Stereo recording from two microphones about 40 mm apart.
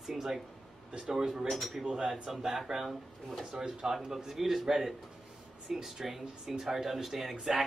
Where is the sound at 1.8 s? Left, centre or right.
Right.